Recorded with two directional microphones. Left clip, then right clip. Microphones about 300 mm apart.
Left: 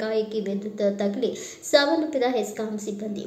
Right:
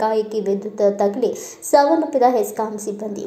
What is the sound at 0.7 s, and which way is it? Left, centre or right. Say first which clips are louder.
A woman's voice: right 7 dB; centre.